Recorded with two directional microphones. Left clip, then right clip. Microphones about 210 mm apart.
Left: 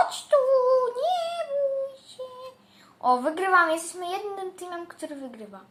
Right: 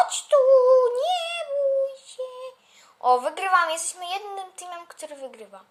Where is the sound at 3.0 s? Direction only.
40° right (ahead or behind).